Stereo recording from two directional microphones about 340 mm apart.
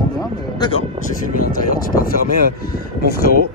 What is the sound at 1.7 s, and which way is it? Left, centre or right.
Speech, left.